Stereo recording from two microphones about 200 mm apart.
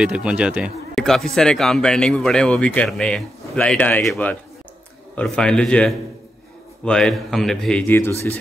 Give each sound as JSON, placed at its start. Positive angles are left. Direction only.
{"t": 0.0, "sound": "speech", "side_deg": -5}